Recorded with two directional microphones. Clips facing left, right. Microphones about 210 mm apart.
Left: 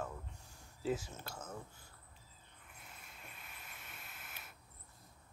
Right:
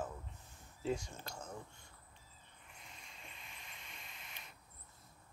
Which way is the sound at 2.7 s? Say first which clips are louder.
Left 1 dB; 5° left (ahead or behind).